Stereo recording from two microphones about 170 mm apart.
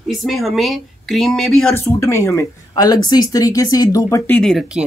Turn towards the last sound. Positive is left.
turn(degrees=0)  # may be behind; listen again after turning